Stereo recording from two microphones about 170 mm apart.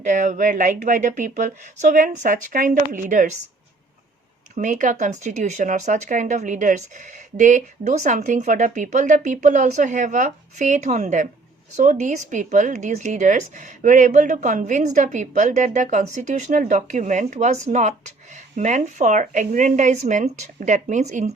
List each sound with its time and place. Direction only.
0.0 s speech: 45° right (ahead or behind)
4.5 s speech: 45° right (ahead or behind)